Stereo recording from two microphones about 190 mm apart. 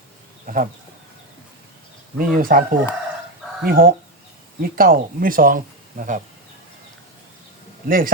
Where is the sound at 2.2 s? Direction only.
50° right (ahead or behind).